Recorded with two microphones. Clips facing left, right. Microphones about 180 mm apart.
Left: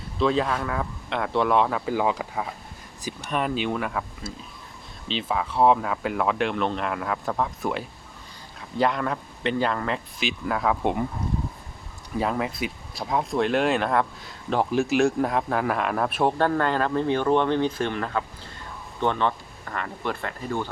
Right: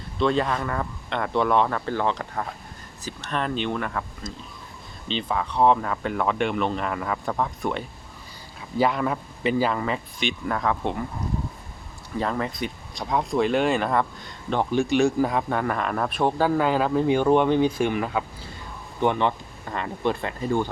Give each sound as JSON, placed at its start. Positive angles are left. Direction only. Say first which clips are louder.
{"t": 0.2, "sound": "speech", "louder": "even", "side_deg": 0}
{"t": 12.1, "sound": "speech", "louder": "left 1 dB", "side_deg": 5}